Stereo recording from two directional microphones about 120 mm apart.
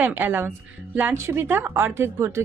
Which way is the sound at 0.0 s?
15° right (ahead or behind).